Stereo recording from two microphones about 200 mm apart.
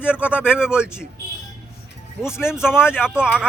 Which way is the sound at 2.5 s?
5° right (ahead or behind).